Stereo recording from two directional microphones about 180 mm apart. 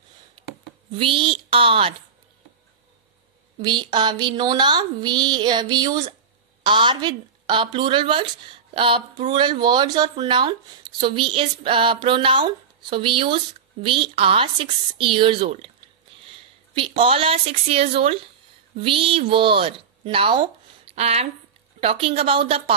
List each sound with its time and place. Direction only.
0.9 s speech: 30° right (ahead or behind)
3.6 s speech: 25° right (ahead or behind)
16.3 s a sound: 30° right (ahead or behind)
17.0 s speech: 30° right (ahead or behind)